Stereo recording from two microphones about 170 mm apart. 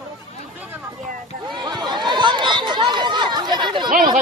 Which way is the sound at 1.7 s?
25° right (ahead or behind).